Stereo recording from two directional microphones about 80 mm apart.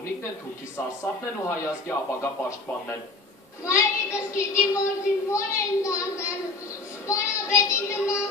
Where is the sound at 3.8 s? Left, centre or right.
Left.